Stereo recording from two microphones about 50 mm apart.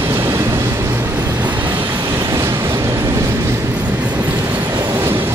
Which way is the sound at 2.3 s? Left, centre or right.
Right.